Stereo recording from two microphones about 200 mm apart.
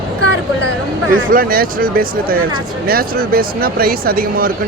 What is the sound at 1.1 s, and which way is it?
Speech, 45° right (ahead or behind).